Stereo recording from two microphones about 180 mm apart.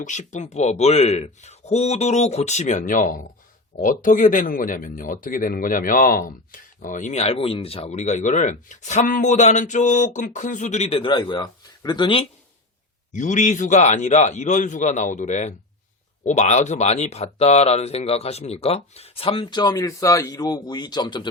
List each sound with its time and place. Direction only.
0.0 s speech: 40° left (ahead or behind)
13.1 s speech: 45° left (ahead or behind); by 21.2 s 25° left (ahead or behind)